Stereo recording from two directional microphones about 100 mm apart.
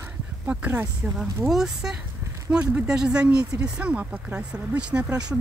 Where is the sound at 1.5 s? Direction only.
5° right (ahead or behind).